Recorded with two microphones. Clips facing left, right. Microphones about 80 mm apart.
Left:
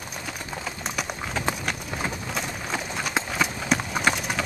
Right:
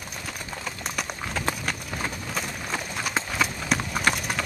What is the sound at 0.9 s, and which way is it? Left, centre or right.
Clip-clop, centre.